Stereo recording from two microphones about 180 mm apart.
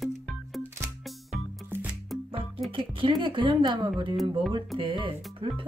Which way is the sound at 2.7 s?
30° right (ahead or behind).